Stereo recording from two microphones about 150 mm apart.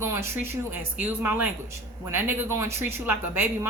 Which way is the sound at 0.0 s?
20° right (ahead or behind).